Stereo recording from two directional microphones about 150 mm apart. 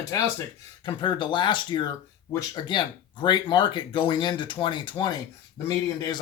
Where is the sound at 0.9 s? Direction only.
30° left (ahead or behind).